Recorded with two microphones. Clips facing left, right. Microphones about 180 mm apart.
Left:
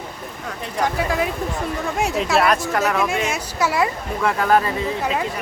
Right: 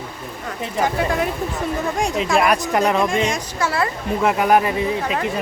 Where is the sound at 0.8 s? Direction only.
Centre (ahead or behind).